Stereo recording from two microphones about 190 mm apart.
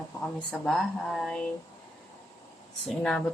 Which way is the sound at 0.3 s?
5° left (ahead or behind).